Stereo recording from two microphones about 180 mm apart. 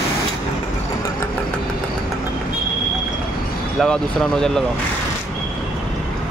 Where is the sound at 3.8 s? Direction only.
5° left (ahead or behind).